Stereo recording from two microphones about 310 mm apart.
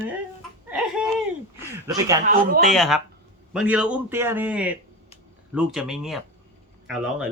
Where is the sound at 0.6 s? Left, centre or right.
Centre.